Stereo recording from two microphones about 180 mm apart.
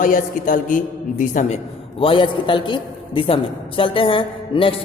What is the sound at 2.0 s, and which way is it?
A man's voice, 30° left (ahead or behind).